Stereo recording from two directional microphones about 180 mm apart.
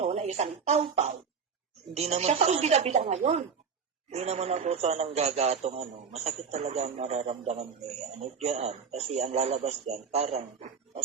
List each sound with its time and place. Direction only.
0.0 s a man's voice: 35° right (ahead or behind)